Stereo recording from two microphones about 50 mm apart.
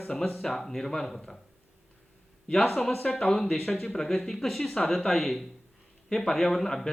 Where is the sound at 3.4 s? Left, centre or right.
Centre.